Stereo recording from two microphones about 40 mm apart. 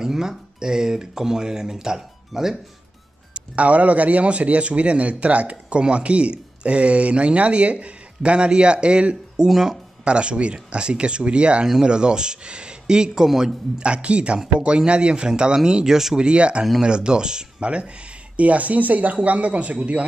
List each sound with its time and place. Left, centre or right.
0.0 s speech: centre
3.3 s a man's voice: right; by 9.8 s centre
10.0 s speech: right
11.6 s speech: centre
13.7 s speech: right; by 16.2 s centre
16.2 s a man's voice: right